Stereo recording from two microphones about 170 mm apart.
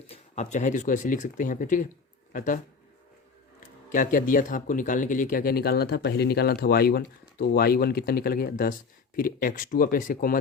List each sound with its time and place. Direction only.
0.1 s speech: 40° left (ahead or behind)
3.9 s speech: 55° left (ahead or behind)